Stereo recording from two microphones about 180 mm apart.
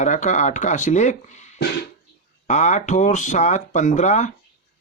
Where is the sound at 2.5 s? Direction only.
40° left (ahead or behind).